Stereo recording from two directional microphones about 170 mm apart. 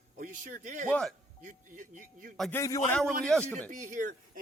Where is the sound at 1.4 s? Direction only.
50° right (ahead or behind).